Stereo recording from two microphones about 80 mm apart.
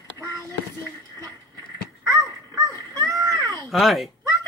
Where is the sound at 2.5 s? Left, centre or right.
Right.